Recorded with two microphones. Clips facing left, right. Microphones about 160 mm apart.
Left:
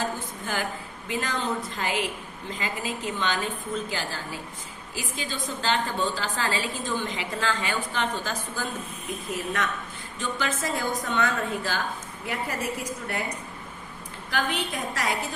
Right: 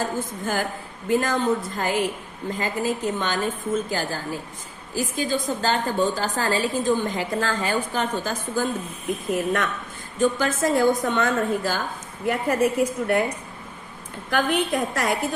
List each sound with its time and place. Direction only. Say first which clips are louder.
0.0 s a woman's voice: right 4 dB; 45° right (ahead or behind)
14.3 s a woman's voice: right 7 dB; 55° right (ahead or behind)